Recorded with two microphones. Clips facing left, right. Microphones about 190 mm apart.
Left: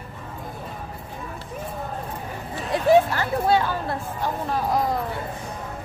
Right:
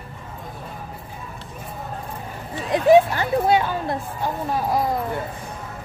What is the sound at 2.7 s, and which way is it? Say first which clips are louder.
A woman's voice: right 3 dB; 15° right (ahead or behind).